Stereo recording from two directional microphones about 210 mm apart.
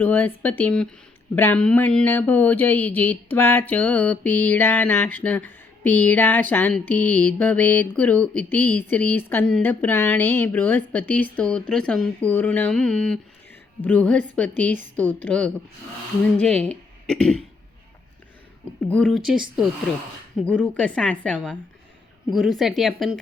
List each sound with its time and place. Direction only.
0.0 s mantra: 10° left (ahead or behind)
14.9 s a woman's voice: 5° left (ahead or behind)
18.9 s a woman's voice: 5° left (ahead or behind)